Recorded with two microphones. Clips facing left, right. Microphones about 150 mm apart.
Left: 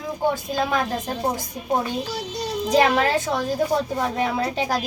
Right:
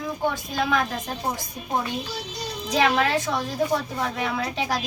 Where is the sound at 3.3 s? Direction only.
35° left (ahead or behind).